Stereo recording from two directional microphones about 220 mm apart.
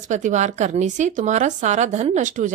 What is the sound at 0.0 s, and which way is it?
Speech, 35° right (ahead or behind).